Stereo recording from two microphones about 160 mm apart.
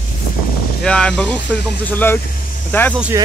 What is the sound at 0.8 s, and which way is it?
Speech, 5° left (ahead or behind).